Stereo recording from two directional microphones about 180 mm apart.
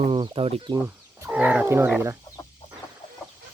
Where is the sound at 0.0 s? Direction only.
30° right (ahead or behind).